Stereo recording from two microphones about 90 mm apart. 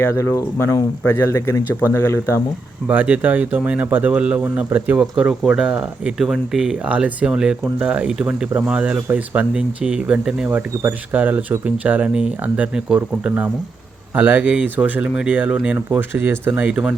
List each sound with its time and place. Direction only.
0.0 s speech: 30° left (ahead or behind)
2.8 s speech: 20° right (ahead or behind)
10.5 s speech: 15° right (ahead or behind)